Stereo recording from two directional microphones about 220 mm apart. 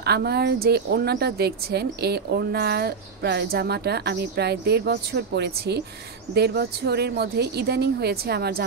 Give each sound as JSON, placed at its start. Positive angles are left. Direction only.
{"t": 0.0, "sound": "a woman's voice", "side_deg": -45}